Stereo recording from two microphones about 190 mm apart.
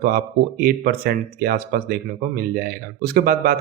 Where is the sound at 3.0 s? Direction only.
50° right (ahead or behind).